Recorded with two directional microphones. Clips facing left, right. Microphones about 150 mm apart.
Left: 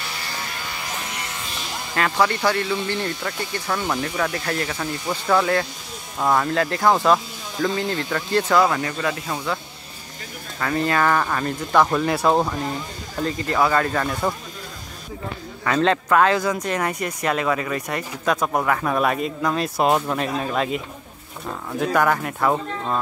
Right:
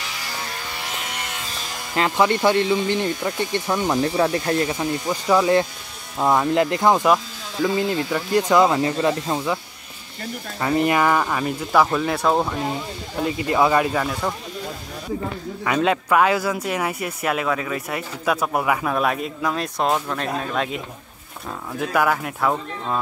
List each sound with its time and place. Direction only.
2.0 s speech: 20° right (ahead or behind)
4.0 s speech: 30° right (ahead or behind)
10.6 s speech: 20° right (ahead or behind); by 12.5 s centre (ahead or behind)
13.2 s speech: 15° right (ahead or behind)
15.6 s speech: 10° right (ahead or behind)